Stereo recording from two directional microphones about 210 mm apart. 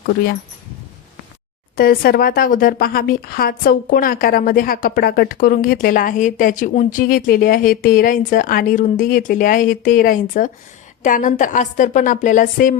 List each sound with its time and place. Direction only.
1.7 s speech: 45° left (ahead or behind)